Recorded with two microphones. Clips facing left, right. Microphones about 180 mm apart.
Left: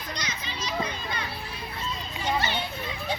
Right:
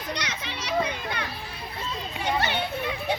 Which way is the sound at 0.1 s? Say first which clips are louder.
Right 3 dB; 70° right (ahead or behind).